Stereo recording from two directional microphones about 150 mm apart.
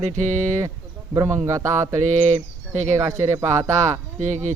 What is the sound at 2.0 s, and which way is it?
Speech, 50° right (ahead or behind).